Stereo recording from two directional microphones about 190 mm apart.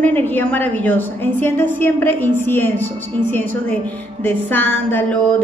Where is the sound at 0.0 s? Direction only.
10° left (ahead or behind).